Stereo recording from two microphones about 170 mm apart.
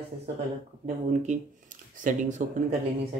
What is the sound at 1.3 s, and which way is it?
Speech, 40° right (ahead or behind).